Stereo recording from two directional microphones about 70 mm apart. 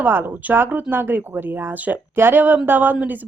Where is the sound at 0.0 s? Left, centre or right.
Right.